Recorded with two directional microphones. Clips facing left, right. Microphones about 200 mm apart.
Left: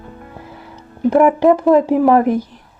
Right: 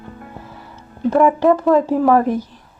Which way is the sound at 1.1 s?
15° left (ahead or behind).